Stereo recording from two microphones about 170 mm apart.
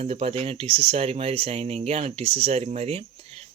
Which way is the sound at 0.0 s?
35° right (ahead or behind).